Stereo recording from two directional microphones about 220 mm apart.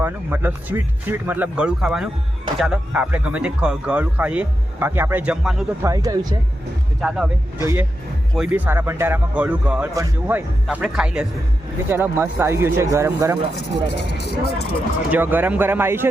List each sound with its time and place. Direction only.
0.0 s speech: 10° right (ahead or behind)
5.8 s speech: 15° right (ahead or behind)
13.6 s speech: 50° left (ahead or behind)
15.1 s speech: 10° right (ahead or behind)